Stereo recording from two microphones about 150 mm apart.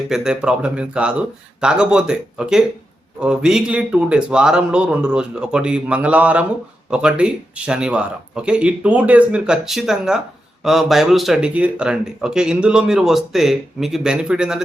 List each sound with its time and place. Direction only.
0.1 s speech: 5° right (ahead or behind)